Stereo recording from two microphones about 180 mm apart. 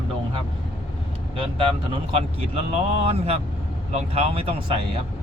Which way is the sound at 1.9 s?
35° right (ahead or behind).